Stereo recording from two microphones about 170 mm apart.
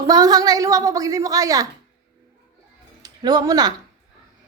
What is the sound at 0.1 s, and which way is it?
A woman's voice, 20° right (ahead or behind).